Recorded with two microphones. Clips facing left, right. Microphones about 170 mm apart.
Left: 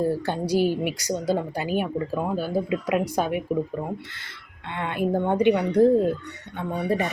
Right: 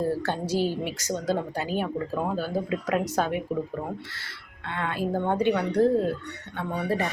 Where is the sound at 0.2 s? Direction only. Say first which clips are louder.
Left 3 dB; 15° left (ahead or behind).